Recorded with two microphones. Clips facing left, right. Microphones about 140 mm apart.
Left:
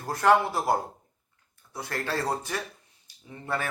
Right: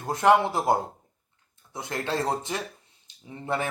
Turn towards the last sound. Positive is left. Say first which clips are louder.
# right 3 dB
turn(degrees=-20)  # may be behind; listen again after turning